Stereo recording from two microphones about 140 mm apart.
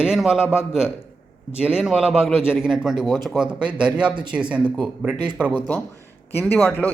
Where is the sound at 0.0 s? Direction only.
5° right (ahead or behind).